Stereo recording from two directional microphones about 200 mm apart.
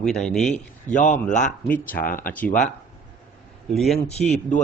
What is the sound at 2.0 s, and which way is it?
Speech, 45° left (ahead or behind).